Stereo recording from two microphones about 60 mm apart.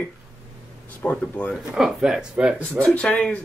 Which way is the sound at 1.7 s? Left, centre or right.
Centre.